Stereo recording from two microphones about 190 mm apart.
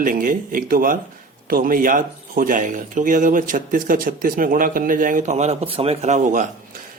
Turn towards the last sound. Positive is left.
turn(degrees=-40)  # may be behind; listen again after turning